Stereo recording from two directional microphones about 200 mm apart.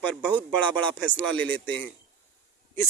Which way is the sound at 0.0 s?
5° left (ahead or behind).